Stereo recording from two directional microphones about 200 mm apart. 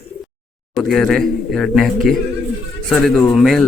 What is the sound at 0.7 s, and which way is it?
A man's voice, centre (ahead or behind).